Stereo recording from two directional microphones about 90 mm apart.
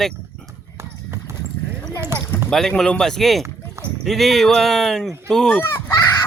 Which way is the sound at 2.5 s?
5° left (ahead or behind).